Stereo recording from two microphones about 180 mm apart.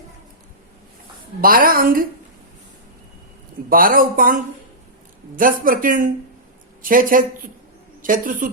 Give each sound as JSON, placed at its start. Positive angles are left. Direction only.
{"t": 1.4, "sound": "speech", "side_deg": -55}
{"t": 3.7, "sound": "speech", "side_deg": -50}
{"t": 5.4, "sound": "speech", "side_deg": -50}